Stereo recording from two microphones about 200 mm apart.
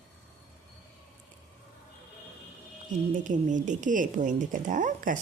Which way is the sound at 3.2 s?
40° right (ahead or behind).